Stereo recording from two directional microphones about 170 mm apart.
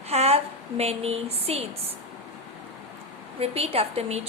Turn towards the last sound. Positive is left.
turn(degrees=-35)  # may be behind; listen again after turning